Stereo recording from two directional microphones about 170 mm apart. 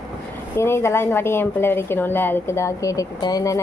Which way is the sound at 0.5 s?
15° left (ahead or behind).